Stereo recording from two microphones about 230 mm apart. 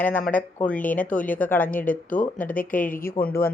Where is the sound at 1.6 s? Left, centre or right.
Left.